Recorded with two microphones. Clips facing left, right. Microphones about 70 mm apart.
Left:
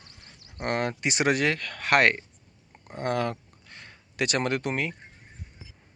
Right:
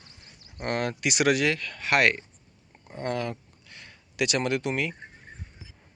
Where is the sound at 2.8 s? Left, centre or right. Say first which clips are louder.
Left 3 dB; left.